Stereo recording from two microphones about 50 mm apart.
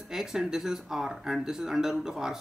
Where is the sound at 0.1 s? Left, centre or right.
Centre.